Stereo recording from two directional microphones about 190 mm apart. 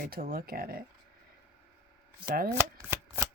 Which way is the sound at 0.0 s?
50° right (ahead or behind).